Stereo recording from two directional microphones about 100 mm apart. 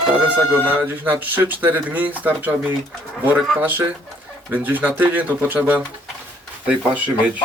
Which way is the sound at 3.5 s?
15° right (ahead or behind).